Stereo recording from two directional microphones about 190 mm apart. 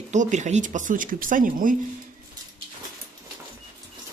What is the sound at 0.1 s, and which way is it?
Speech, 40° right (ahead or behind).